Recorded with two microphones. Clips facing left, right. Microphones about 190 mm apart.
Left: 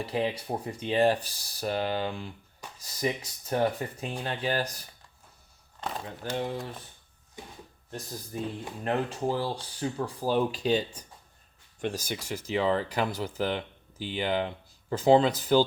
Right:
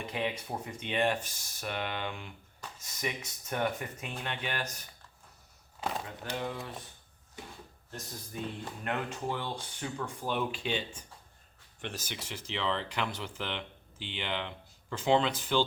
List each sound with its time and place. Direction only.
0.0 s speech: 35° left (ahead or behind)
5.8 s speech: 10° right (ahead or behind)
6.3 s speech: 30° left (ahead or behind)
7.9 s speech: 35° left (ahead or behind)
12.3 s speech: 40° left (ahead or behind)